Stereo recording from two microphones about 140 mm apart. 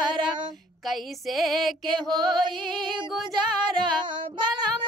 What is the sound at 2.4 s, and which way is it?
Music, 35° right (ahead or behind).